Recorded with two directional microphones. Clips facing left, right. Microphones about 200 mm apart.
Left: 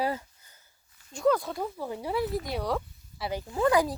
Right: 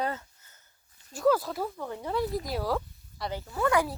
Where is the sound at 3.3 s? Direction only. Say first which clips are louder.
Left 3 dB; 15° left (ahead or behind).